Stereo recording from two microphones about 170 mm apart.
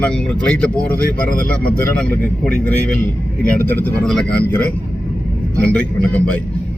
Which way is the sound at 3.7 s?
5° left (ahead or behind).